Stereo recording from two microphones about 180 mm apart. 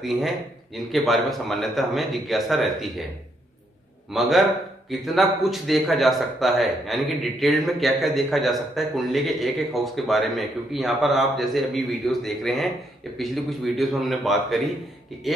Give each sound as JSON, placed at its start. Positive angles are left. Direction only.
{"t": 0.0, "sound": "a man's voice", "side_deg": 0}
{"t": 4.1, "sound": "a man's voice", "side_deg": 0}